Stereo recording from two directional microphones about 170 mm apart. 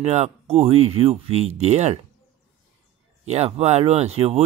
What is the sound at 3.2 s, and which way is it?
Speech, 40° right (ahead or behind).